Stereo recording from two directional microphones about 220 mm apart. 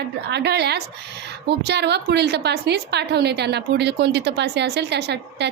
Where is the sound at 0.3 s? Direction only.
50° right (ahead or behind).